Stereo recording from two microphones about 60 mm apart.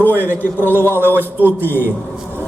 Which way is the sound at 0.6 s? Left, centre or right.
Left.